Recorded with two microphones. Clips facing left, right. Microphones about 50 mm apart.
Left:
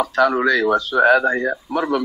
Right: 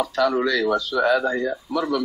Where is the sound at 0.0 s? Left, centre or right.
Left.